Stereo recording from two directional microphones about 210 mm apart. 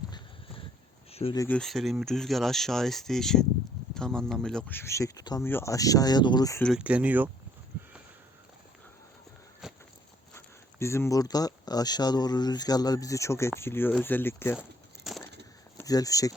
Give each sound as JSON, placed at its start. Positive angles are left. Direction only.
{"t": 1.1, "sound": "speech", "side_deg": 25}
{"t": 1.4, "sound": "speech", "side_deg": 5}
{"t": 6.6, "sound": "speech", "side_deg": 0}
{"t": 9.6, "sound": "walk", "side_deg": 0}
{"t": 10.3, "sound": "speech", "side_deg": 10}
{"t": 15.1, "sound": "a sound", "side_deg": 0}
{"t": 15.8, "sound": "speech", "side_deg": 15}